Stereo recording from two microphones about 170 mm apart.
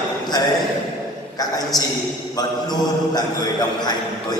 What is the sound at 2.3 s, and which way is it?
A man's voice, 25° left (ahead or behind).